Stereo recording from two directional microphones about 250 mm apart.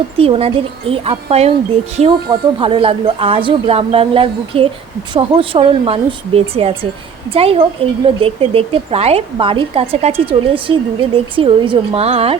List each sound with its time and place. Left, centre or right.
0.2 s a woman's voice: right